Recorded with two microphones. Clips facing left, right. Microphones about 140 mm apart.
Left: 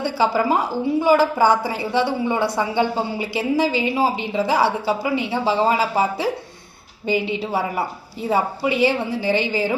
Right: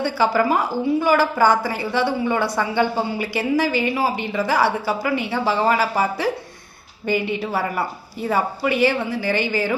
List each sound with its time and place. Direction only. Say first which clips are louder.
0.0 s a woman's voice: right 1 dB; 20° left (ahead or behind)